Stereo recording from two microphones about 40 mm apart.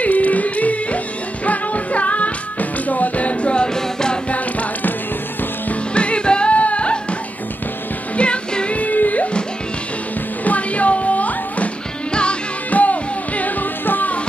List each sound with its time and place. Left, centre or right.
0.0 s music: left
3.6 s music: centre
5.9 s music: left
8.2 s music: left
10.4 s music: left
12.1 s music: left
12.7 s music: left